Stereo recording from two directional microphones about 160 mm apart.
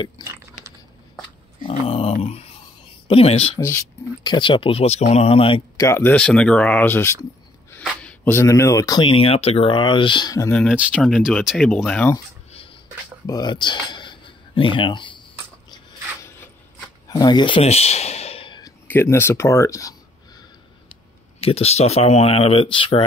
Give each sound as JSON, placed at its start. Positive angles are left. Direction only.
{"t": 0.2, "sound": "chewing", "side_deg": -15}
{"t": 1.7, "sound": "dog", "side_deg": 40}
{"t": 3.1, "sound": "speech", "side_deg": 40}
{"t": 3.5, "sound": "speech", "side_deg": 15}
{"t": 4.2, "sound": "speech", "side_deg": 30}
{"t": 5.8, "sound": "speech", "side_deg": 15}
{"t": 10.5, "sound": "speech", "side_deg": 5}
{"t": 13.3, "sound": "speech", "side_deg": 25}
{"t": 15.7, "sound": "a sound", "side_deg": 20}
{"t": 17.1, "sound": "speech", "side_deg": 25}
{"t": 17.6, "sound": "a sound", "side_deg": 40}
{"t": 18.9, "sound": "speech", "side_deg": 15}
{"t": 21.4, "sound": "speech", "side_deg": 40}